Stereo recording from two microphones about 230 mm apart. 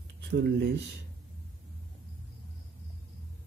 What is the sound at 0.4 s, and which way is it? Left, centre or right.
Speech, right.